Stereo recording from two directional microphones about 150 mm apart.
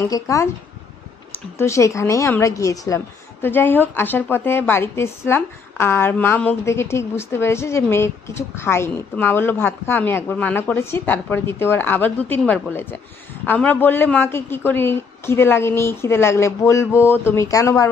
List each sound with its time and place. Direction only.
0.0 s a woman's voice: 20° left (ahead or behind)
1.6 s a woman's voice: 20° left (ahead or behind)